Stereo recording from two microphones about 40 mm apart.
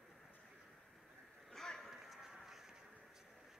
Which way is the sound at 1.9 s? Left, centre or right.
Centre.